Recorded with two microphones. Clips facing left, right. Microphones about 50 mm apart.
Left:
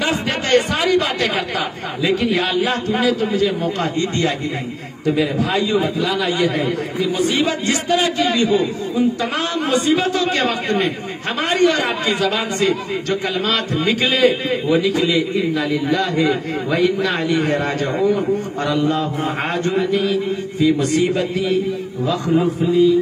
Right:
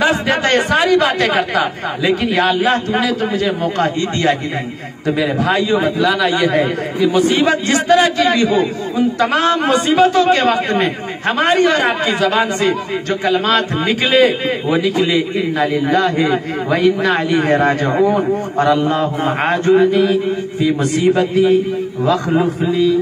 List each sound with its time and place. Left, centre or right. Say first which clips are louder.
0.0 s a man's voice: right 6 dB; right
8.0 s a man's voice: right 4 dB; right
9.2 s a man's voice: right 7 dB; right
22.0 s a man's voice: right 2 dB; right